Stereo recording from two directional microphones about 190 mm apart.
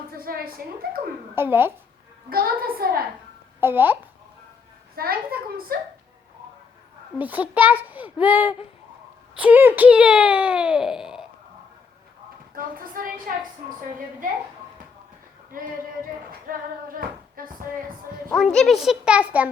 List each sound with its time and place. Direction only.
0.1 s a woman's voice: 50° right (ahead or behind)
1.4 s speech: 10° right (ahead or behind)
2.3 s speech: 50° right (ahead or behind)
3.6 s speech: 10° right (ahead or behind)
4.9 s speech: 50° right (ahead or behind)
7.2 s speech: 10° right (ahead or behind)
12.5 s speech: 50° right (ahead or behind)
15.5 s speech: 50° right (ahead or behind)
17.0 s speech: 50° right (ahead or behind)
18.3 s a child's voice: centre (ahead or behind)